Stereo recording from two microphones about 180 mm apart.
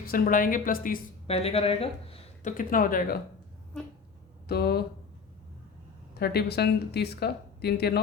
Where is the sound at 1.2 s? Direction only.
35° left (ahead or behind).